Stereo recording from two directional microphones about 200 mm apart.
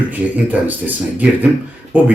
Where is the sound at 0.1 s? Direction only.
10° right (ahead or behind).